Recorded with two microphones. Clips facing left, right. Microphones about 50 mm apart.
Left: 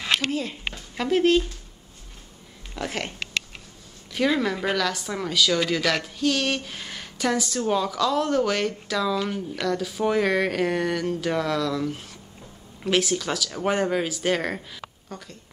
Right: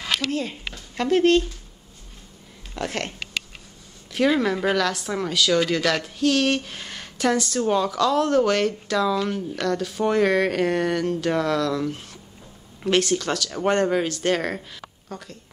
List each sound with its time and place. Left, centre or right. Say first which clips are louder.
0.3 s a woman's voice: right 1 dB; centre
2.7 s a woman's voice: right 2 dB; centre
4.4 s a woman's voice: right 3 dB; centre